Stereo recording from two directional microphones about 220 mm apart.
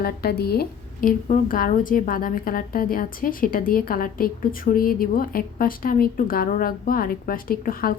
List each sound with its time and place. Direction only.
0.0 s a woman's voice: 45° left (ahead or behind)